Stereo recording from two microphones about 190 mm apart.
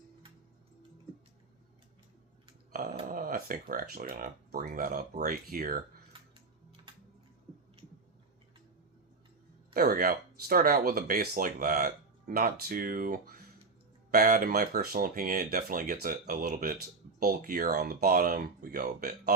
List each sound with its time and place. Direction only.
3.1 s speech: 50° right (ahead or behind)
6.1 s music: 25° right (ahead or behind)
6.9 s a sound: 25° right (ahead or behind)
9.7 s speech: 50° right (ahead or behind)